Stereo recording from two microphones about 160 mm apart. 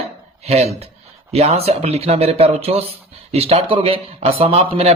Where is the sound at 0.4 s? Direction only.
40° right (ahead or behind).